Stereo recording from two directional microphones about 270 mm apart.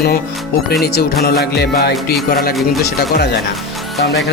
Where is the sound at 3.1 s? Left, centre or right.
Left.